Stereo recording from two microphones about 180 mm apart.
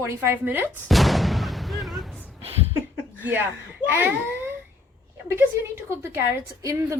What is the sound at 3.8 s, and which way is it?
A woman's voice, 10° right (ahead or behind).